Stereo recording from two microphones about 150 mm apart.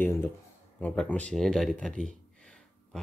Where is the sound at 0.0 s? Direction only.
15° left (ahead or behind).